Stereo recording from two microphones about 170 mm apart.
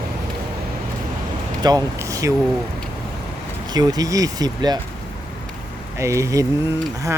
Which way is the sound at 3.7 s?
25° right (ahead or behind).